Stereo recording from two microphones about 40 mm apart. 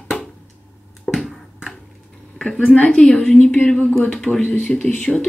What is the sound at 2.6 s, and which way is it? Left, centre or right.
Speech, left.